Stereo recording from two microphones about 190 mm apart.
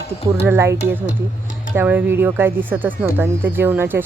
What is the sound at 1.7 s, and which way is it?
Speech, 10° right (ahead or behind).